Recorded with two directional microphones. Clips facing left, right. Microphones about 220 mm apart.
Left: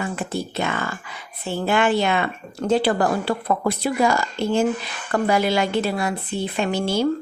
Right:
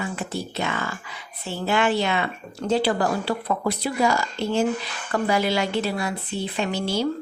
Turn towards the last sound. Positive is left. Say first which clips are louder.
# left 3 dB
turn(degrees=50)  # may be behind; listen again after turning